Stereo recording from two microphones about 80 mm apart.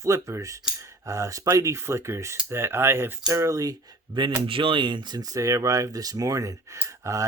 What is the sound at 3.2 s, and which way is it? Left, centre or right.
Speech, right.